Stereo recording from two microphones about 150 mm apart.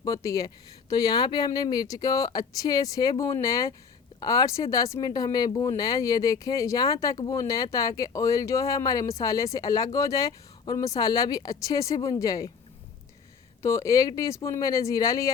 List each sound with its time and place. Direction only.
0.0 s speech: 20° left (ahead or behind)
13.6 s speech: 20° left (ahead or behind)